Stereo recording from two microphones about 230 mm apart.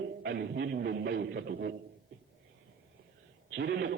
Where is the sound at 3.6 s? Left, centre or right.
Right.